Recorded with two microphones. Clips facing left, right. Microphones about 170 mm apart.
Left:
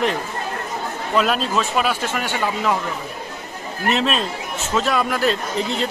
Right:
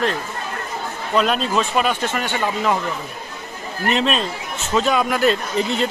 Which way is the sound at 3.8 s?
Centre (ahead or behind).